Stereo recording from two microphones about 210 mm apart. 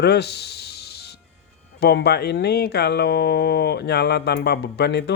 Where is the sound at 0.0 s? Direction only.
50° left (ahead or behind).